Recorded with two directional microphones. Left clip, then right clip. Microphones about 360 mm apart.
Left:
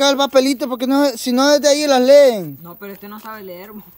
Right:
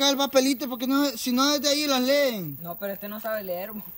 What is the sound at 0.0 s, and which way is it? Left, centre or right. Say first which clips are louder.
Speech: left 8 dB; centre.